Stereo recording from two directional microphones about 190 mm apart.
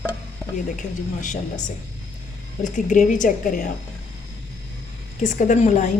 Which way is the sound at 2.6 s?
40° left (ahead or behind).